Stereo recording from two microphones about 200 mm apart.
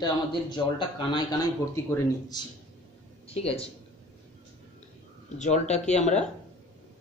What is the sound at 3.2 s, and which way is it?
Speech, 30° left (ahead or behind).